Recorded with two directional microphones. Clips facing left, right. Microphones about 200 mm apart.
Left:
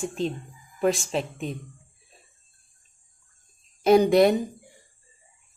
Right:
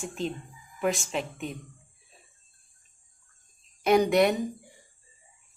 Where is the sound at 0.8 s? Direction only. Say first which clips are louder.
Left 4 dB; 35° left (ahead or behind).